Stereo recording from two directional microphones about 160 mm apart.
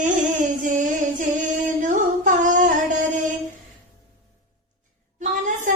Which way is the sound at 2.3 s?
50° right (ahead or behind).